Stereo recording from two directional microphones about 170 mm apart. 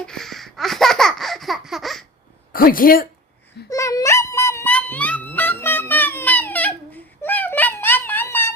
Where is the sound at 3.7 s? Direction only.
20° left (ahead or behind).